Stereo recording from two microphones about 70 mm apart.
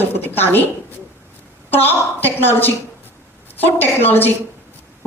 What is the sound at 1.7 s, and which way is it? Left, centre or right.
A woman's voice, left.